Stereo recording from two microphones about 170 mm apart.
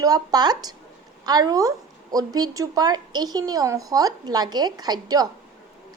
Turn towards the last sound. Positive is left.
turn(degrees=-20)  # may be behind; listen again after turning